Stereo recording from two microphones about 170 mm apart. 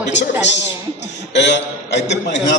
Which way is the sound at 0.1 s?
90° left.